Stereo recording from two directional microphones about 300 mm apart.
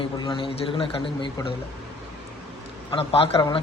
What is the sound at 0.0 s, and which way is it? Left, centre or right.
Speech, centre.